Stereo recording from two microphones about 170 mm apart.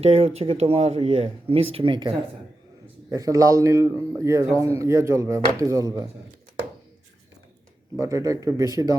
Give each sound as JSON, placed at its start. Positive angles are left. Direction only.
{"t": 0.0, "sound": "a man's voice", "side_deg": -40}
{"t": 7.9, "sound": "speech", "side_deg": -15}